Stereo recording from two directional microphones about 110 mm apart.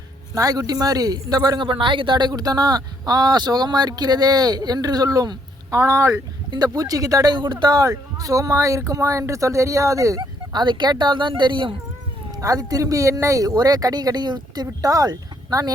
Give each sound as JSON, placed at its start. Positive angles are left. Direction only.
{"t": 0.3, "sound": "speech", "side_deg": -35}
{"t": 10.2, "sound": "speech", "side_deg": -45}
{"t": 12.4, "sound": "speech", "side_deg": -30}